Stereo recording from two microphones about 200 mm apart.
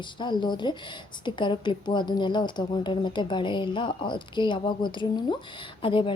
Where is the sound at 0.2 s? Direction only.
20° left (ahead or behind).